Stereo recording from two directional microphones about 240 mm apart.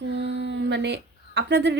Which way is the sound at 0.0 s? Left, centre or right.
Right.